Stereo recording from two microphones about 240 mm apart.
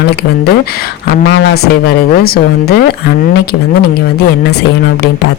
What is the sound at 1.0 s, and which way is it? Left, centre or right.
Speech, left.